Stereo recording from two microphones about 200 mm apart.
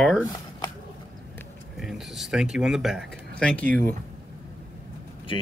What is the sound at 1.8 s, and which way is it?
Speech, centre (ahead or behind).